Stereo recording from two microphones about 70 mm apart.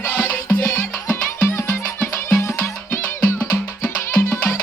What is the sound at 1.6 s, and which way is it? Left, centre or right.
Music, left.